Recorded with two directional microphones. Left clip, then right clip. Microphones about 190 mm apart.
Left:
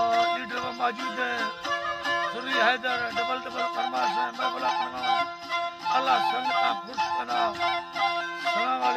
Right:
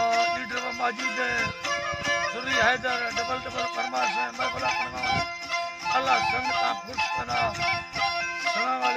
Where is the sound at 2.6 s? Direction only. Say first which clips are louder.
Even; 5° right (ahead or behind).